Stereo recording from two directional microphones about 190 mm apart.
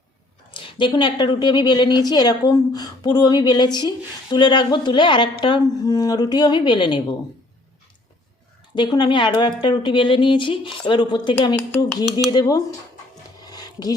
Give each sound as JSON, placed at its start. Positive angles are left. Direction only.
{"t": 0.5, "sound": "a woman's voice", "side_deg": 25}
{"t": 8.7, "sound": "a woman's voice", "side_deg": 25}
{"t": 13.4, "sound": "a sound", "side_deg": 20}